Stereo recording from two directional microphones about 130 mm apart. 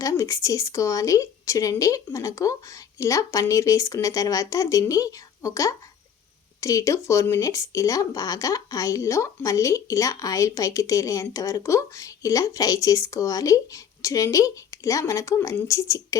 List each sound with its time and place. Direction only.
0.0 s speech: 25° left (ahead or behind)